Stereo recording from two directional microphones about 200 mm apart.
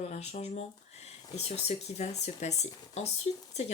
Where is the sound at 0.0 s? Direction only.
35° left (ahead or behind).